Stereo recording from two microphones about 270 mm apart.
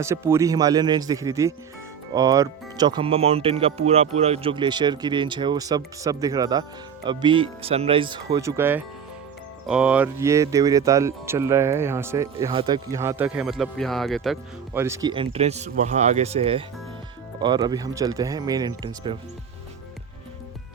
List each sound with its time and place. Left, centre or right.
0.0 s speech: centre